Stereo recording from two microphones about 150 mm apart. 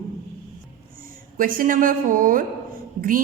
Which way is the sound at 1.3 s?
65° right (ahead or behind).